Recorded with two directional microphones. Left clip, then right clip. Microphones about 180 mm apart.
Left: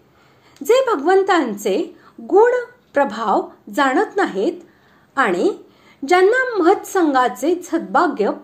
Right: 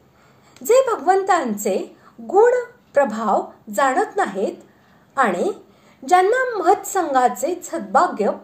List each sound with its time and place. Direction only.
0.7 s a woman's voice: 25° left (ahead or behind)